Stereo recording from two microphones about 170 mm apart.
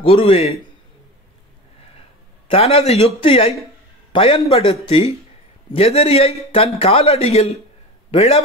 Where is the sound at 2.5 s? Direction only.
35° left (ahead or behind).